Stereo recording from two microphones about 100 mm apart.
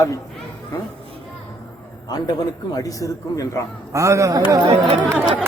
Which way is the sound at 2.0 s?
40° left (ahead or behind).